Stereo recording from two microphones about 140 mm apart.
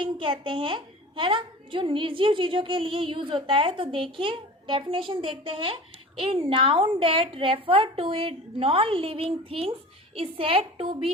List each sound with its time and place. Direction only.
0.0 s a woman's voice: 35° right (ahead or behind)